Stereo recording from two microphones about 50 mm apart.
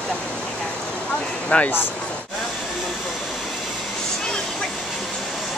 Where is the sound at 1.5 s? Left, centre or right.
Left.